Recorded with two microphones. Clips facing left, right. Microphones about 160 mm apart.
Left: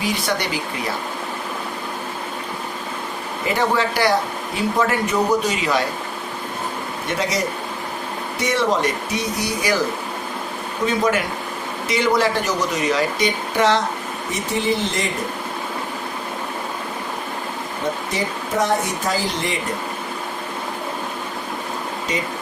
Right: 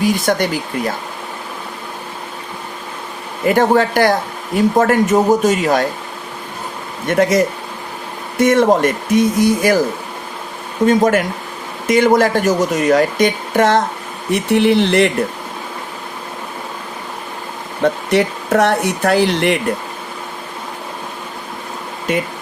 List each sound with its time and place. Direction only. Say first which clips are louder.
0.0 s speech: right 7 dB; 45° right (ahead or behind)
3.4 s speech: right 7 dB; 50° right (ahead or behind)
7.1 s speech: right 10 dB; 50° right (ahead or behind)
10.8 s speech: right 7 dB; 50° right (ahead or behind)
14.3 s speech: right 9 dB; 65° right (ahead or behind)
18.1 s speech: right 9 dB; 70° right (ahead or behind)
22.1 s speech: right 8 dB; 55° right (ahead or behind)